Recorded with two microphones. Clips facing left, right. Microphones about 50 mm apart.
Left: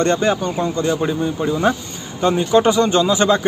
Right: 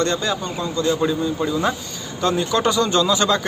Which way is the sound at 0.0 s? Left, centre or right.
Left.